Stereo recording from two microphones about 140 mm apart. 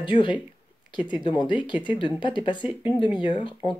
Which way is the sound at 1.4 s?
35° left (ahead or behind).